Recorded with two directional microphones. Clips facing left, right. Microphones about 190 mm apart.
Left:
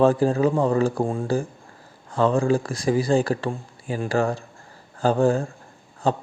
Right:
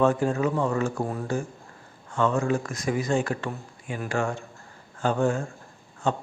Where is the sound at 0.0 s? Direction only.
35° left (ahead or behind).